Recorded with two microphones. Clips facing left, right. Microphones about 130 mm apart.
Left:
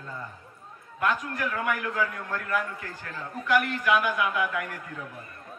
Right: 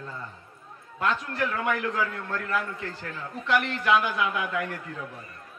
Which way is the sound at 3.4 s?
25° right (ahead or behind).